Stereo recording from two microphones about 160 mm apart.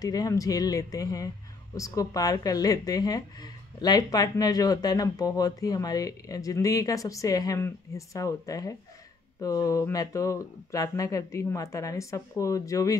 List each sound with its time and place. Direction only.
0.0 s speech: 20° left (ahead or behind)